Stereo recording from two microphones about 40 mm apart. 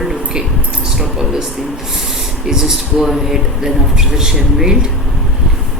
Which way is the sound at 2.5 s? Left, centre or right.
Centre.